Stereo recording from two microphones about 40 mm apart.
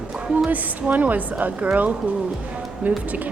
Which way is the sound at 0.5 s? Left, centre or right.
Right.